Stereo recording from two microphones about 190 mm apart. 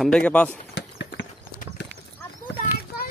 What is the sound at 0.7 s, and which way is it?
Clip-clop, 65° left (ahead or behind).